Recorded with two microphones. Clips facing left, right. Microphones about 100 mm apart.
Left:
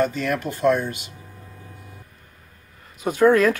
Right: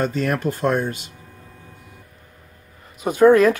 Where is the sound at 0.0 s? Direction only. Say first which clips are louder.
Right 1 dB; 40° right (ahead or behind).